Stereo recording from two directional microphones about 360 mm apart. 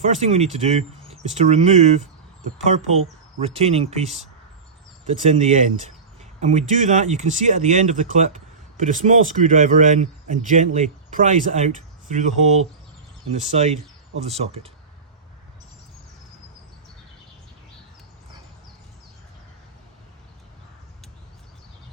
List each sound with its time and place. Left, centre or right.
0.0 s speech: centre
3.4 s speech: centre